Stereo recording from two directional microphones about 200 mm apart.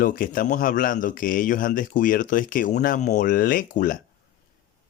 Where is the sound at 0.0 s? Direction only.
45° left (ahead or behind).